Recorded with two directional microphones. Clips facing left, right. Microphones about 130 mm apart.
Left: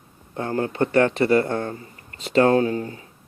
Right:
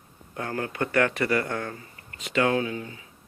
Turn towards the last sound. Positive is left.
turn(degrees=40)  # may be behind; listen again after turning